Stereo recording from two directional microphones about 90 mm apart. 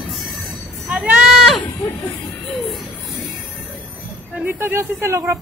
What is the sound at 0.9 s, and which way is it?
Livestock, 5° right (ahead or behind).